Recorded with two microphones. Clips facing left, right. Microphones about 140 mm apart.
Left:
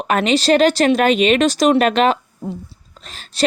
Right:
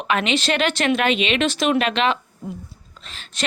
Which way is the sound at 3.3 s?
35° left (ahead or behind).